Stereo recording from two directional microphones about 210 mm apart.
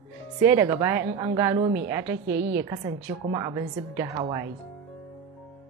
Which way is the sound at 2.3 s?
50° right (ahead or behind).